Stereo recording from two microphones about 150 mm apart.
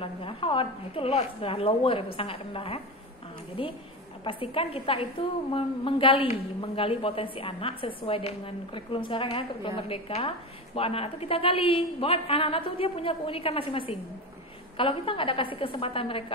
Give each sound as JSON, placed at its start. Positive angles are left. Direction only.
{"t": 0.0, "sound": "a woman's voice", "side_deg": 35}
{"t": 4.2, "sound": "a woman's voice", "side_deg": 35}